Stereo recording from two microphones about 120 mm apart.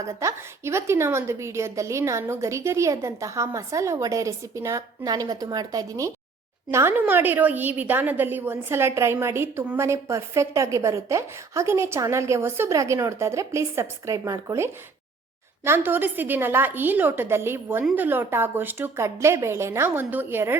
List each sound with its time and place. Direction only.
0.0 s a woman's voice: 25° right (ahead or behind)
6.7 s a woman's voice: 20° right (ahead or behind)